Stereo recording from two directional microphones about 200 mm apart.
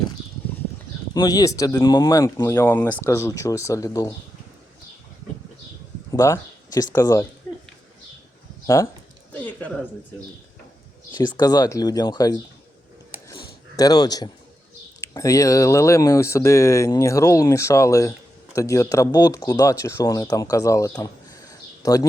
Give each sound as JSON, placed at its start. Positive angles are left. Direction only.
{"t": 1.1, "sound": "speech", "side_deg": 20}
{"t": 6.1, "sound": "a sound", "side_deg": 15}
{"t": 6.9, "sound": "speech", "side_deg": 15}
{"t": 8.6, "sound": "speech", "side_deg": 15}
{"t": 11.1, "sound": "speech", "side_deg": 20}
{"t": 13.2, "sound": "a sound", "side_deg": 20}
{"t": 15.0, "sound": "speech", "side_deg": 15}